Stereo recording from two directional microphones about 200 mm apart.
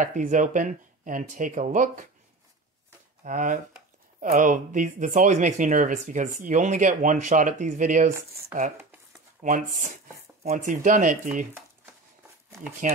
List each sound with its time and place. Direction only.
0.0 s speech: 40° right (ahead or behind)
3.3 s speech: 40° right (ahead or behind)
9.4 s speech: 40° right (ahead or behind)
12.9 s speech: 40° right (ahead or behind)